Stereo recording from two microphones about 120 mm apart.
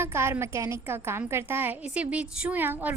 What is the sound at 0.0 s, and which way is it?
A woman's voice, 20° right (ahead or behind).